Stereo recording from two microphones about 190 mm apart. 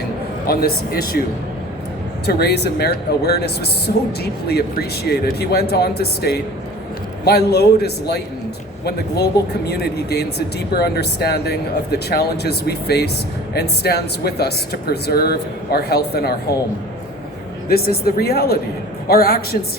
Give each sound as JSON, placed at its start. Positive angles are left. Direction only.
{"t": 0.4, "sound": "speech", "side_deg": 55}
{"t": 2.2, "sound": "speech", "side_deg": 60}
{"t": 17.7, "sound": "speech", "side_deg": 55}